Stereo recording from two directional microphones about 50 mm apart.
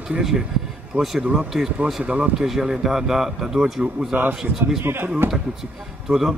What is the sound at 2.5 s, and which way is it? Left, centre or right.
Speech, centre.